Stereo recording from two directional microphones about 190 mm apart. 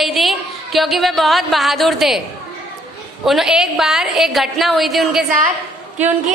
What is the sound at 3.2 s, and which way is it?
A woman's voice, centre (ahead or behind).